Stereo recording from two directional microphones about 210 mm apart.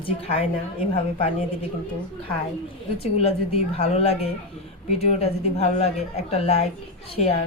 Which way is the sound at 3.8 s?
30° left (ahead or behind).